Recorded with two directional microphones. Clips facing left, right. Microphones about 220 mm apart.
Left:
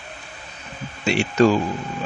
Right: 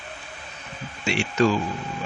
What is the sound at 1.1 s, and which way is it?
Speech, 40° left (ahead or behind).